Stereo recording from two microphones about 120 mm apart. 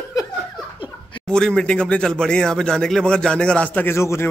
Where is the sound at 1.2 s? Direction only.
5° left (ahead or behind).